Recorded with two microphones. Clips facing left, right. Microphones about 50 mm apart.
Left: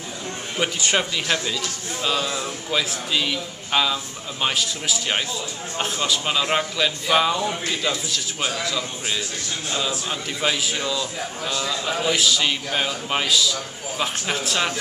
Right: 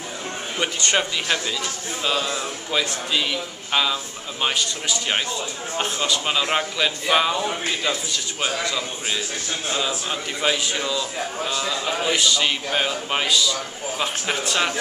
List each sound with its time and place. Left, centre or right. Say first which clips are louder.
0.6 s a man's voice: even; centre
10.0 s a man's voice: right 1 dB; centre